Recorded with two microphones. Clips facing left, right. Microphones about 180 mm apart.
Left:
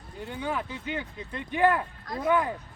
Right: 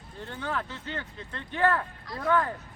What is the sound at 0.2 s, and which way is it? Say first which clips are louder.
Speech: left 2 dB; 10° left (ahead or behind).